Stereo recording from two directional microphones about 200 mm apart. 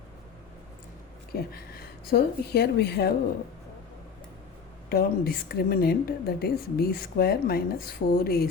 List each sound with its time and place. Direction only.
1.3 s speech: 50° left (ahead or behind)
4.9 s a woman's voice: 50° left (ahead or behind)